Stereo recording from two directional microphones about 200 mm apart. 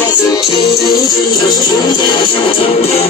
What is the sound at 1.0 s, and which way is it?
Music, 20° left (ahead or behind).